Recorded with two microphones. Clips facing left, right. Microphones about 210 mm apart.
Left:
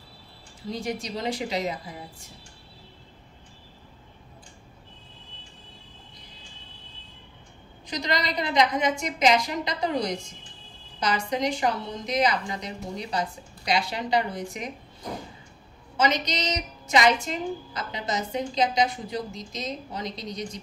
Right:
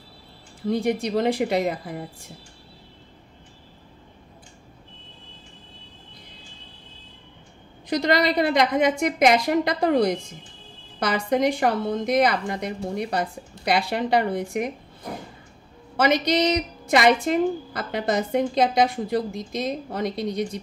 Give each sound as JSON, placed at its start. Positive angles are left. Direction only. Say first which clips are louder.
{"t": 0.6, "sound": "a woman's voice", "louder": "right 8 dB", "side_deg": -55}
{"t": 7.9, "sound": "a woman's voice", "louder": "right 8 dB", "side_deg": -55}
{"t": 16.0, "sound": "a woman's voice", "louder": "right 6 dB", "side_deg": -55}